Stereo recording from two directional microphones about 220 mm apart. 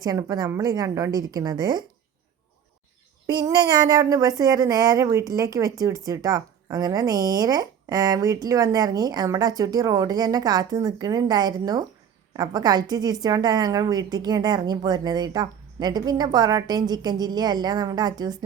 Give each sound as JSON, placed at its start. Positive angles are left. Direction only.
{"t": 0.0, "sound": "a woman's voice", "side_deg": -15}
{"t": 3.2, "sound": "a woman's voice", "side_deg": -20}